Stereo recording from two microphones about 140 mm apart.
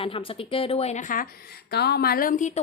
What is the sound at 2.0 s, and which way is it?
Speech, 90° left.